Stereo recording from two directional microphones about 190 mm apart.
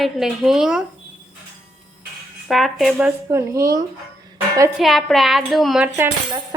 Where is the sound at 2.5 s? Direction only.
Centre (ahead or behind).